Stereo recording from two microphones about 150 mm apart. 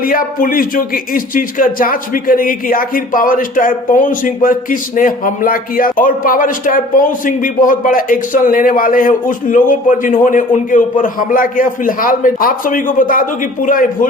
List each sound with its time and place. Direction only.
0.0 s speech: 70° left (ahead or behind)